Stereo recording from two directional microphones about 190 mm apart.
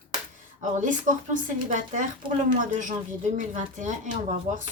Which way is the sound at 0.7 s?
40° right (ahead or behind).